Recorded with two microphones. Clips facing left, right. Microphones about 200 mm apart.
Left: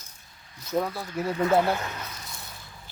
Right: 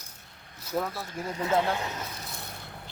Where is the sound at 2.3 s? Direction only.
60° right (ahead or behind).